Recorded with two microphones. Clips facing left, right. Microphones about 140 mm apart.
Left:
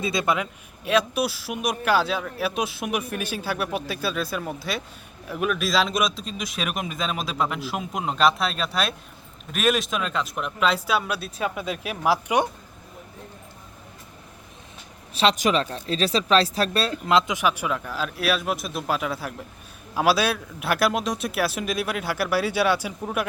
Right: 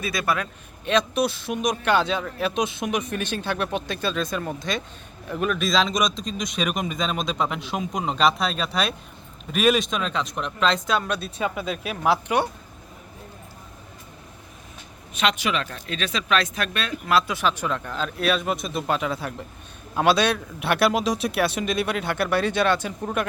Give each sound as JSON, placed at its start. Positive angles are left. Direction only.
{"t": 0.0, "sound": "a man's voice", "side_deg": 20}
{"t": 0.9, "sound": "speech", "side_deg": 5}
{"t": 15.1, "sound": "speech", "side_deg": 35}
{"t": 17.1, "sound": "speech", "side_deg": 20}